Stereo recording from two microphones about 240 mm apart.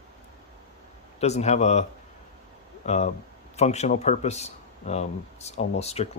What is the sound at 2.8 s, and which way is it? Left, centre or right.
Speech, left.